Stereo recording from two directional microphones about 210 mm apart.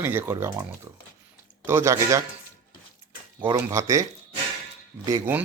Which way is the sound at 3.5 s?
15° right (ahead or behind).